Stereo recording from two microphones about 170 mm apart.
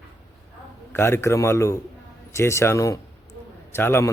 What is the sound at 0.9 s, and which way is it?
A man's voice, 15° left (ahead or behind).